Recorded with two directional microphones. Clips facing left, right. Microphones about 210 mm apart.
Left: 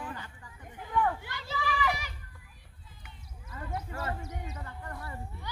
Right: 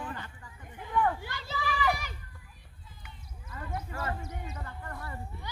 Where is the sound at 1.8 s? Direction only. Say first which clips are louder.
Right 4 dB; 45° right (ahead or behind).